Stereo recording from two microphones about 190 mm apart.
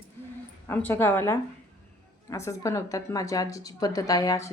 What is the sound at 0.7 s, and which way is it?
Speech, 10° left (ahead or behind).